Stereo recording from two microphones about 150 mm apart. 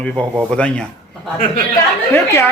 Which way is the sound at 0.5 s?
5° left (ahead or behind).